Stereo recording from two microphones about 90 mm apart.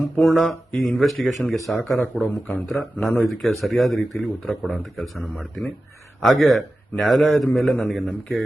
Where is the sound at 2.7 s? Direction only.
Centre (ahead or behind).